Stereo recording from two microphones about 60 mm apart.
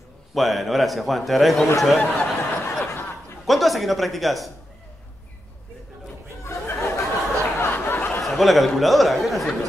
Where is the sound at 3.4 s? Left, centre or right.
Centre.